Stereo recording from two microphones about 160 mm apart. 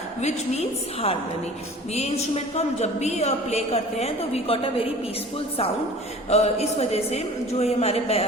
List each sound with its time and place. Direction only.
0.2 s a woman's voice: 45° left (ahead or behind)
1.9 s a man's voice: 40° left (ahead or behind)
6.3 s a man's voice: 40° left (ahead or behind)